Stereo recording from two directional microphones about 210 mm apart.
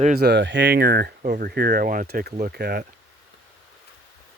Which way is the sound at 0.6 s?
45° right (ahead or behind).